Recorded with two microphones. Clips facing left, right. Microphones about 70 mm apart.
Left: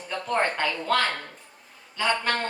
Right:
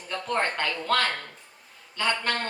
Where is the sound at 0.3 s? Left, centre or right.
Centre.